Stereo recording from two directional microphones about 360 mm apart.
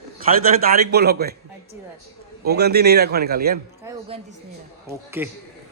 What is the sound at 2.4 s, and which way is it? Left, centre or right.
A man's voice, right.